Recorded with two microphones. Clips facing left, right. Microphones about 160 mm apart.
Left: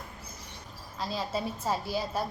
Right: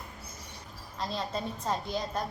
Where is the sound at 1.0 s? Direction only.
5° left (ahead or behind).